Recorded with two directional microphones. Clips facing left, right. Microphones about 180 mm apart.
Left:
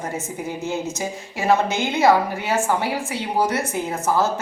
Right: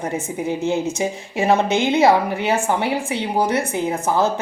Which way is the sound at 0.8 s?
20° right (ahead or behind).